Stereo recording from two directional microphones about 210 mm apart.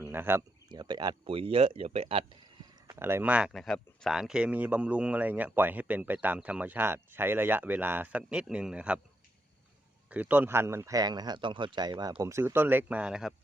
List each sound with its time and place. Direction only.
0.0 s speech: 10° right (ahead or behind); by 2.2 s 25° right (ahead or behind)
2.8 s speech: 10° right (ahead or behind)
10.1 s speech: 10° right (ahead or behind)